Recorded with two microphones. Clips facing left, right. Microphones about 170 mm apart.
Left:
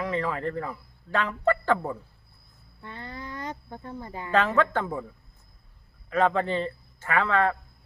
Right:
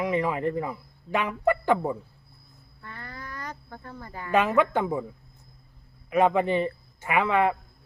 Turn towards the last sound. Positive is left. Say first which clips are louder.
# right 1 dB
turn(degrees=-15)  # may be behind; listen again after turning